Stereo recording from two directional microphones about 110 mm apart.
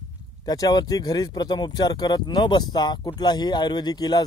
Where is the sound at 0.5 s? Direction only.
35° left (ahead or behind).